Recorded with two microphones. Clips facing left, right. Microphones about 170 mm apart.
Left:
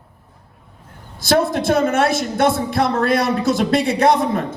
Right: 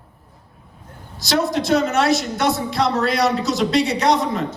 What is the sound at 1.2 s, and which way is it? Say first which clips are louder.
A man's voice: left 3 dB; 55° left (ahead or behind).